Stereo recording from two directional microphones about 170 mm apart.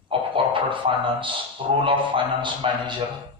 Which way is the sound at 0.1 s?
30° right (ahead or behind).